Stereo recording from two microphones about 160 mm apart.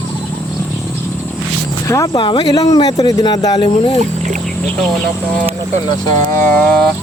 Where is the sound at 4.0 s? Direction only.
50° right (ahead or behind).